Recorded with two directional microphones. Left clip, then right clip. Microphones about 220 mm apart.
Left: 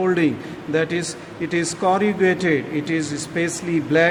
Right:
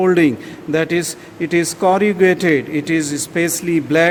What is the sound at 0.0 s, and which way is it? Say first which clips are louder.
Speech: right 6 dB; 45° right (ahead or behind).